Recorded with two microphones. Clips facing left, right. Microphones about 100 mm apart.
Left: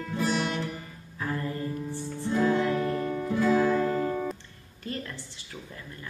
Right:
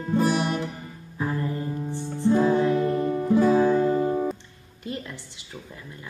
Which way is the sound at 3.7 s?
30° right (ahead or behind).